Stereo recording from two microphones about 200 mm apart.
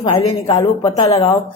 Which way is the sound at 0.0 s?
20° left (ahead or behind).